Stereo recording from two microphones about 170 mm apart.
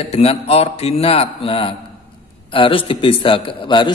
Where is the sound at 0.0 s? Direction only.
35° left (ahead or behind).